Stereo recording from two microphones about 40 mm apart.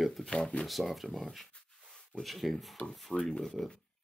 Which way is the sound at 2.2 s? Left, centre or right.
Centre.